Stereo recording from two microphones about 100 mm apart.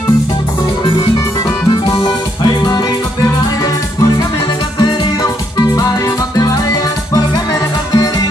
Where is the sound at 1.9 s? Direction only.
55° left (ahead or behind).